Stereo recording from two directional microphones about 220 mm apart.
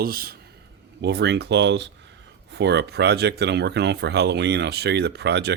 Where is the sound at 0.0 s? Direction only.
40° right (ahead or behind).